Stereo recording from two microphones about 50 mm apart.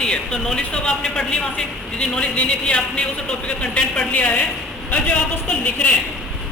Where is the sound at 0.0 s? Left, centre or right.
Centre.